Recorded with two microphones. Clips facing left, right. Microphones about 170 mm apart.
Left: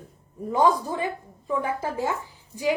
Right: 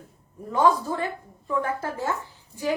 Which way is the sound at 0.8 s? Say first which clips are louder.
Even; 15° left (ahead or behind).